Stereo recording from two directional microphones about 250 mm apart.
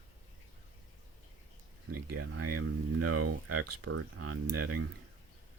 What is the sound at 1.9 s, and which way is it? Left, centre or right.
Speech, right.